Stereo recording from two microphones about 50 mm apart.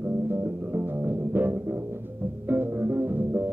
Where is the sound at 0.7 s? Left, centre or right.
Right.